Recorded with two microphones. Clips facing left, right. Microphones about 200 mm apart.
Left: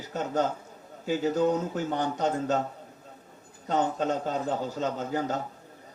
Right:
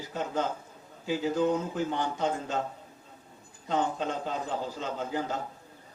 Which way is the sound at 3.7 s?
40° left (ahead or behind).